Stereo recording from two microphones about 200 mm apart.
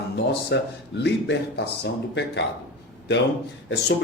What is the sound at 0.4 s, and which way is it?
Speech, 60° left (ahead or behind).